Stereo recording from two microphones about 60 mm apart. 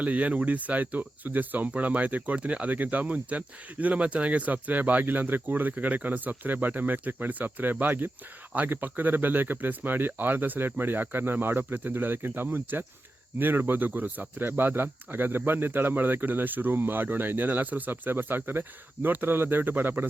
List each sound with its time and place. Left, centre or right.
0.0 s speech: right